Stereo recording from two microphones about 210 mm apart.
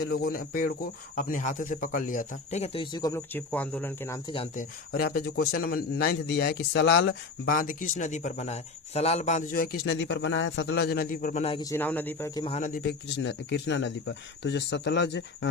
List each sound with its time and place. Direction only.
0.0 s speech: 45° left (ahead or behind); by 4.2 s 10° left (ahead or behind)
4.5 s speech: 45° left (ahead or behind)
11.4 s speech: 25° left (ahead or behind)
11.7 s speech: 10° left (ahead or behind)
12.5 s speech: 40° left (ahead or behind); by 15.4 s 60° left (ahead or behind)